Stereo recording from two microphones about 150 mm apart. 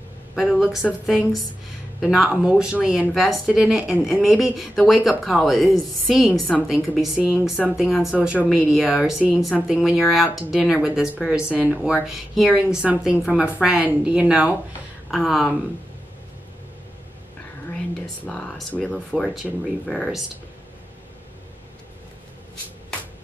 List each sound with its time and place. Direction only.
0.4 s a woman's voice: 5° right (ahead or behind)
18.2 s speech: 5° left (ahead or behind)